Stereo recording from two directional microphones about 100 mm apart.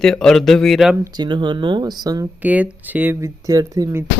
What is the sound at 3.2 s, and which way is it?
Speech, 35° right (ahead or behind).